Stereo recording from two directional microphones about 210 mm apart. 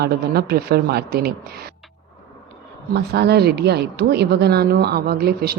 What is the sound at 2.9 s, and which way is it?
Speech, 50° right (ahead or behind).